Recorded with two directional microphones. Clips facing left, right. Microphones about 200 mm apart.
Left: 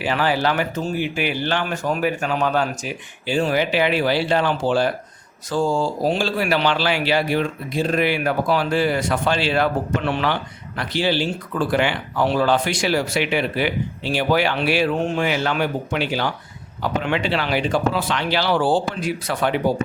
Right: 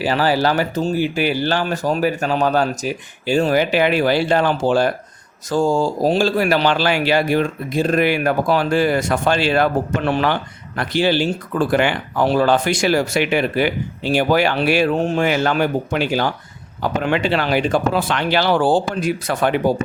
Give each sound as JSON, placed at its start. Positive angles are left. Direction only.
{"t": 0.0, "sound": "speech", "side_deg": -35}